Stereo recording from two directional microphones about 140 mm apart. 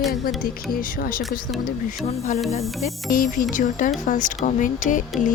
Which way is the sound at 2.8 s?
75° left (ahead or behind).